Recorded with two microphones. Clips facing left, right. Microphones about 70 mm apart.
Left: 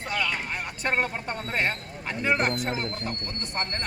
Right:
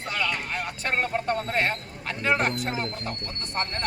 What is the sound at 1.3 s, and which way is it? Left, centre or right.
Speech, centre.